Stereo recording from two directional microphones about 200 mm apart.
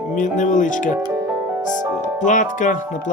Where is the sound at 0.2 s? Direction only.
40° left (ahead or behind).